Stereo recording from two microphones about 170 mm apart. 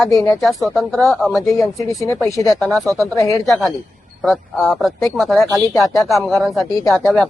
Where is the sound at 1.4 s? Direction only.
20° left (ahead or behind).